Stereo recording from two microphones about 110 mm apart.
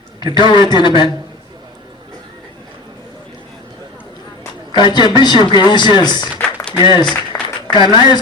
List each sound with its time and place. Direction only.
0.2 s a man's voice: 45° left (ahead or behind)
4.7 s a man's voice: 45° left (ahead or behind)
7.3 s a sound: 30° left (ahead or behind)
7.7 s speech: 40° left (ahead or behind)